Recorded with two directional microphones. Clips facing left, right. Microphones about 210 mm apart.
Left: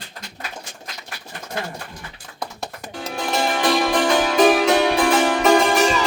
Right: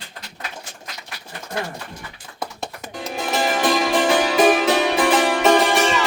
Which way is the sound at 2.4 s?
Centre (ahead or behind).